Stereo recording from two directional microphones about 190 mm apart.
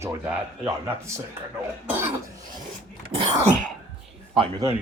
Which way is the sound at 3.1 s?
35° right (ahead or behind).